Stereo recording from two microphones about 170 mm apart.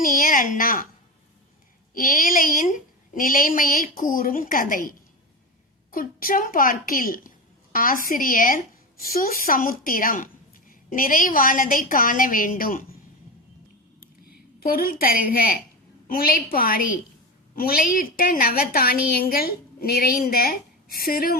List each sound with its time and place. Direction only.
0.0 s a woman's voice: 55° left (ahead or behind)
2.0 s a woman's voice: 55° left (ahead or behind)
14.3 s a woman's voice: 60° left (ahead or behind)